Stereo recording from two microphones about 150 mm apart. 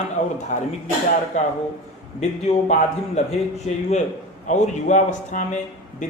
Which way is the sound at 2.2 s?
50° left (ahead or behind).